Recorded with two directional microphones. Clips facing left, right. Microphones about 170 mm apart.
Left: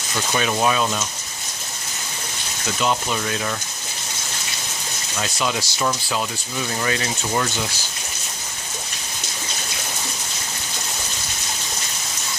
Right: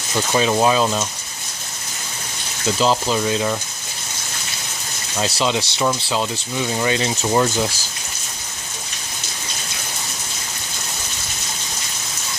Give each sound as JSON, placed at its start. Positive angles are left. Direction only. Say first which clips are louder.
{"t": 0.3, "sound": "speech", "louder": "right 4 dB", "side_deg": -25}
{"t": 2.7, "sound": "speech", "louder": "right 4 dB", "side_deg": -30}
{"t": 5.2, "sound": "speech", "louder": "right 4 dB", "side_deg": -25}